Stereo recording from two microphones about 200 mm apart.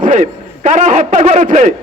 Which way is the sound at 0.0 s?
40° right (ahead or behind).